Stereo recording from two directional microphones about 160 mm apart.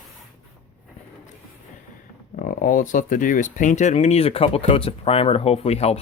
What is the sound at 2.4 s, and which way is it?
Speech, 55° left (ahead or behind).